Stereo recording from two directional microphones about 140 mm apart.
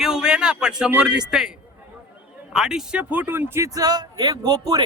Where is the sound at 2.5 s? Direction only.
5° right (ahead or behind); by 4.8 s 25° right (ahead or behind).